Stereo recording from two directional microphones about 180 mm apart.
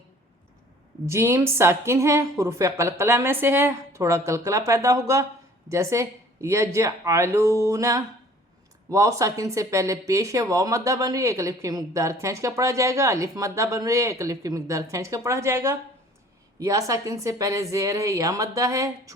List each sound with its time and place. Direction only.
1.0 s a woman's voice: 15° right (ahead or behind)